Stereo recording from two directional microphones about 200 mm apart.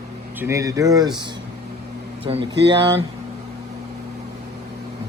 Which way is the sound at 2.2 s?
30° right (ahead or behind).